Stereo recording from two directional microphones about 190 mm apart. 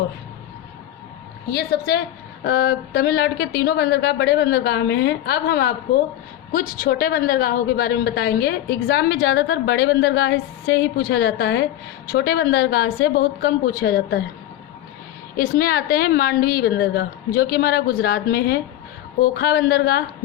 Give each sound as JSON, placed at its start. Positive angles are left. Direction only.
{"t": 1.5, "sound": "a woman's voice", "side_deg": 55}
{"t": 15.4, "sound": "a woman's voice", "side_deg": 55}